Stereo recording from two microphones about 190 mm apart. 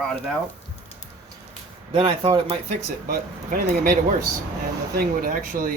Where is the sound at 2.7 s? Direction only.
45° right (ahead or behind).